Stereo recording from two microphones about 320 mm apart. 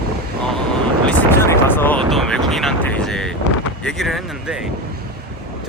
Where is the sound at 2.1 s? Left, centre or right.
Centre.